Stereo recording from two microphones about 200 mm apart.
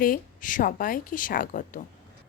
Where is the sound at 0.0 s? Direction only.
40° left (ahead or behind).